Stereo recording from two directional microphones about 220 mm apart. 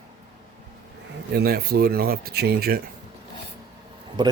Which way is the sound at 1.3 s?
45° right (ahead or behind).